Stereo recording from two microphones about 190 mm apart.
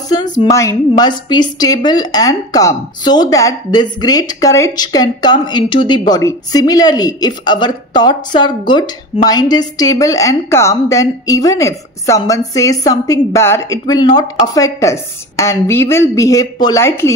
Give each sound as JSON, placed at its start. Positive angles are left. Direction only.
{"t": 0.1, "sound": "speech", "side_deg": 20}